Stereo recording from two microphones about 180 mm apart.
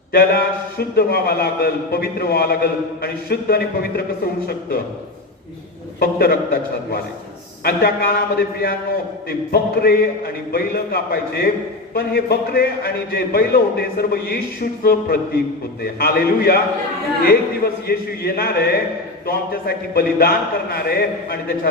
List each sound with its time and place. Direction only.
0.1 s a man's voice: 55° left (ahead or behind)
6.0 s a man's voice: 60° left (ahead or behind)
17.8 s a man's voice: 60° left (ahead or behind)